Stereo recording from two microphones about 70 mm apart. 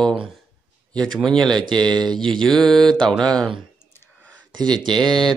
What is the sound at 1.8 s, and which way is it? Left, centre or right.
Speech, right.